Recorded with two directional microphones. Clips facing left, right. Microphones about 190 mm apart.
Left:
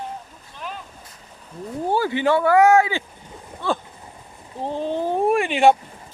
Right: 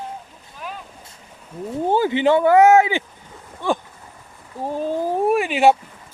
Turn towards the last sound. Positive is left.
turn(degrees=-5)  # may be behind; listen again after turning